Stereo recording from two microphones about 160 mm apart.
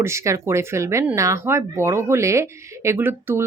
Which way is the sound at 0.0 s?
15° right (ahead or behind).